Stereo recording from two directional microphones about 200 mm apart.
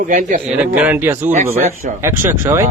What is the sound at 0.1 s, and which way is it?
Speech, 40° right (ahead or behind).